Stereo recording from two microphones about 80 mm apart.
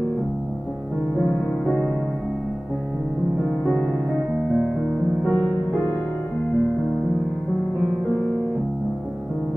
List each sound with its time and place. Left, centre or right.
5.2 s music: centre